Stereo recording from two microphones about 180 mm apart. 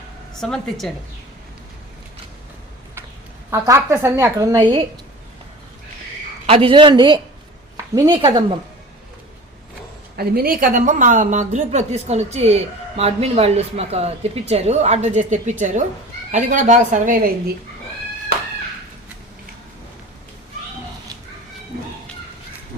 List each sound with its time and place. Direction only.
0.3 s speech: 5° left (ahead or behind)
3.5 s a woman's voice: 15° right (ahead or behind)
6.5 s a woman's voice: 30° right (ahead or behind)
10.2 s a woman's voice: 55° right (ahead or behind)